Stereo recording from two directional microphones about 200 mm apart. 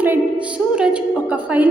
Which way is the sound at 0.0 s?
5° right (ahead or behind).